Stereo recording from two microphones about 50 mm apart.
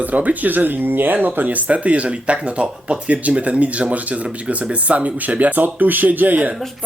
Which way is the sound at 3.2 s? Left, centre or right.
Right.